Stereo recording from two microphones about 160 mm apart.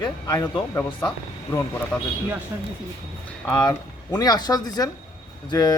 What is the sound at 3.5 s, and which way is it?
A man's voice, 25° left (ahead or behind).